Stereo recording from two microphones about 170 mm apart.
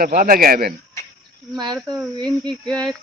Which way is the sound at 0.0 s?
55° right (ahead or behind).